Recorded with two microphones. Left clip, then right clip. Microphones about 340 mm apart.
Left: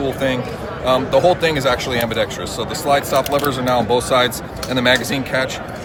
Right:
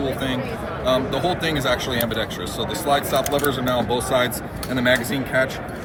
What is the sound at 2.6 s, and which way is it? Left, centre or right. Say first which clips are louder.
Speech: left 4 dB; left.